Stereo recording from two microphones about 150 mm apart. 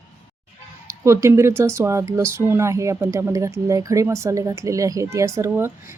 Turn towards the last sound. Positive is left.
turn(degrees=-15)  # may be behind; listen again after turning